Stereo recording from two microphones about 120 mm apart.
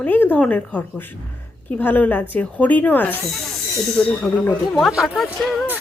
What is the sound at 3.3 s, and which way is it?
Speech, centre (ahead or behind).